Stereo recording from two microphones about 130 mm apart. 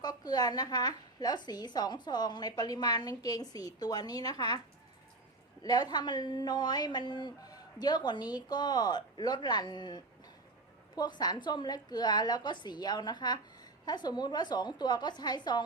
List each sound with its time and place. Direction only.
0.0 s a woman's voice: 30° left (ahead or behind)
5.6 s a woman's voice: 30° left (ahead or behind)